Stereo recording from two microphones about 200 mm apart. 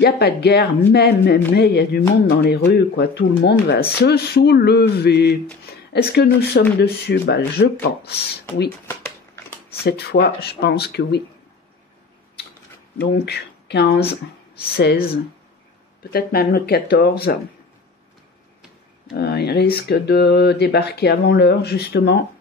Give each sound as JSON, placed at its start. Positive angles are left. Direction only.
{"t": 0.0, "sound": "speech", "side_deg": 55}
{"t": 8.8, "sound": "shuffling cards", "side_deg": 15}
{"t": 9.8, "sound": "speech", "side_deg": 55}
{"t": 13.0, "sound": "speech", "side_deg": 55}
{"t": 19.1, "sound": "speech", "side_deg": 55}